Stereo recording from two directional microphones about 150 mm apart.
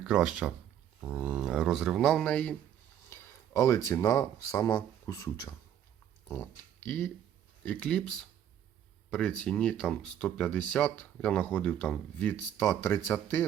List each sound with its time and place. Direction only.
0.0 s speech: 5° right (ahead or behind); by 5.5 s 20° left (ahead or behind)
6.2 s speech: 10° left (ahead or behind)